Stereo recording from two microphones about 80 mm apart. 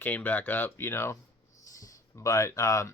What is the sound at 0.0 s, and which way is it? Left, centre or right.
Speech, left.